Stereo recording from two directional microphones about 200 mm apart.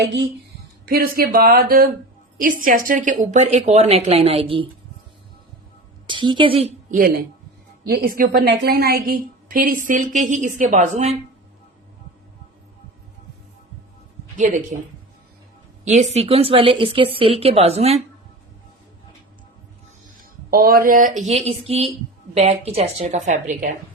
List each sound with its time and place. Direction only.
0.9 s a woman's voice: 45° right (ahead or behind); by 4.7 s 25° right (ahead or behind)
6.1 s a woman's voice: 25° right (ahead or behind)
14.3 s a woman's voice: 40° right (ahead or behind)
15.8 s a woman's voice: 35° right (ahead or behind)
20.5 s a woman's voice: 45° right (ahead or behind)
21.2 s a woman's voice: 30° right (ahead or behind)